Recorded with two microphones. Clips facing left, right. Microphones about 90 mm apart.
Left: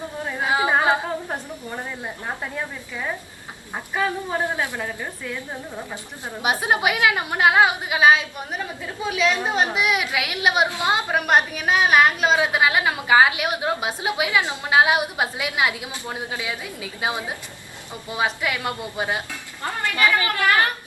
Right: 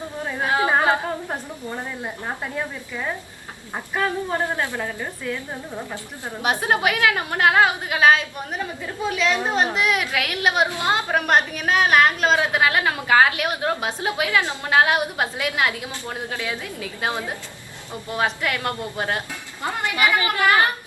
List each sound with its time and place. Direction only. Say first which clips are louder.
0.4 s a sound: even; 10° left (ahead or behind)
2.4 s speech: right 1 dB; centre (ahead or behind)
4.8 s a woman's voice: right 1 dB; 15° right (ahead or behind)
5.9 s a woman's voice: right 1 dB; 15° left (ahead or behind)
19.6 s a woman's voice: even; 15° right (ahead or behind)